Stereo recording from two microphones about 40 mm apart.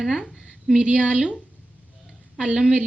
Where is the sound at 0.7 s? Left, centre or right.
Right.